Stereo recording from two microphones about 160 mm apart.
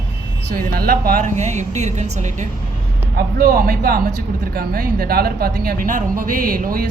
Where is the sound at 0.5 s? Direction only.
65° right (ahead or behind); by 2.5 s 45° right (ahead or behind).